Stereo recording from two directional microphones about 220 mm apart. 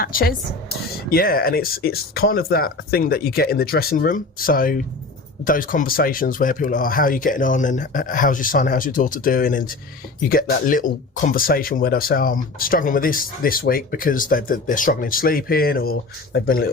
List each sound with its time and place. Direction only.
0.0 s speech: 40° left (ahead or behind)